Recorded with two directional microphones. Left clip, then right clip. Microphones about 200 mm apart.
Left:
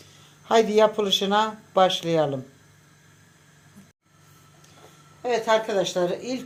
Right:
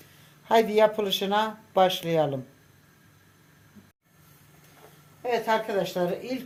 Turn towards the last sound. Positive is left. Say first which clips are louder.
# left 3 dB
turn(degrees=20)  # may be behind; listen again after turning